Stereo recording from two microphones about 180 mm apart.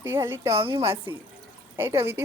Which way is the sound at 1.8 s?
15° right (ahead or behind).